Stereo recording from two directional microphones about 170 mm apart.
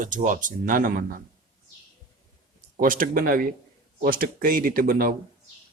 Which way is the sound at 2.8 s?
55° right (ahead or behind).